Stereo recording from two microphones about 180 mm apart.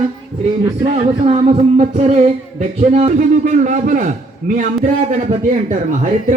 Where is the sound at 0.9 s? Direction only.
35° right (ahead or behind).